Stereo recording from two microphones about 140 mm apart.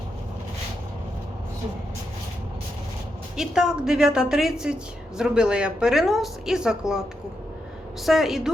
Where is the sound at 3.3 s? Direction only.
5° right (ahead or behind).